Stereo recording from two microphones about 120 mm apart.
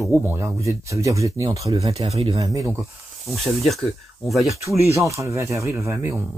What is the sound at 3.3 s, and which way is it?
Speech, centre (ahead or behind).